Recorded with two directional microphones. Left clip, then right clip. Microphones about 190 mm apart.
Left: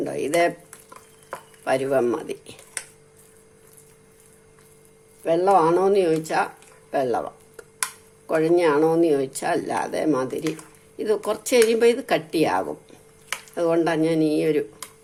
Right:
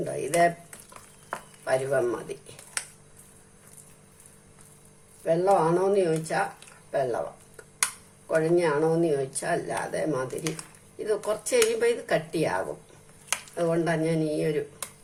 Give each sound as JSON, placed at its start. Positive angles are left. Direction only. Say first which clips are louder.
{"t": 0.0, "sound": "speech", "louder": "left 2 dB", "side_deg": 45}
{"t": 1.6, "sound": "speech", "louder": "left 4 dB", "side_deg": 45}
{"t": 5.2, "sound": "speech", "louder": "left 4 dB", "side_deg": 45}